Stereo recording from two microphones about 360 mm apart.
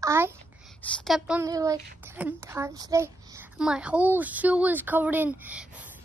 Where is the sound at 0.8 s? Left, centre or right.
Centre.